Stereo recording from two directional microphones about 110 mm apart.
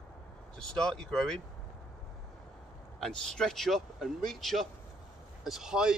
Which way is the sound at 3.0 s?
5° left (ahead or behind).